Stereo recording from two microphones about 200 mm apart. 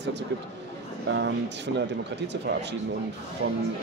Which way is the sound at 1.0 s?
60° right (ahead or behind).